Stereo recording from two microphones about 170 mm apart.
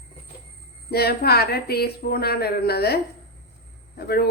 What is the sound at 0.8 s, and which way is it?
A woman's voice, 65° left (ahead or behind).